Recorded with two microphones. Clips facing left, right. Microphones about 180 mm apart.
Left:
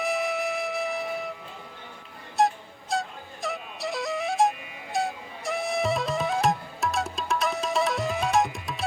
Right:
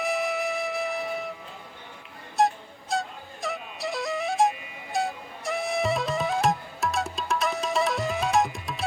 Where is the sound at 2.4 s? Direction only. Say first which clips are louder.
Even; centre (ahead or behind).